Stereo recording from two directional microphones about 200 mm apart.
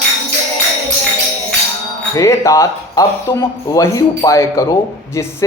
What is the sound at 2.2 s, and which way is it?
Speech, 15° left (ahead or behind).